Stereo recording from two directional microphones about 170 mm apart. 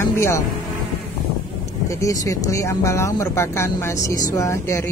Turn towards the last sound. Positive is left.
turn(degrees=15)  # may be behind; listen again after turning